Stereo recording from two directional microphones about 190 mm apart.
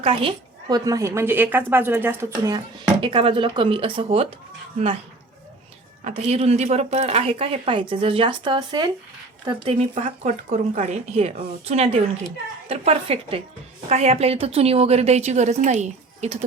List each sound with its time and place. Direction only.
0.0 s a woman's voice: 30° right (ahead or behind)
3.0 s speech: 25° right (ahead or behind)
6.1 s speech: 35° right (ahead or behind)